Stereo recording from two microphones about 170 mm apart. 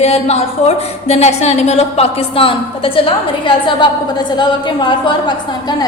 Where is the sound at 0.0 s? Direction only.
40° left (ahead or behind).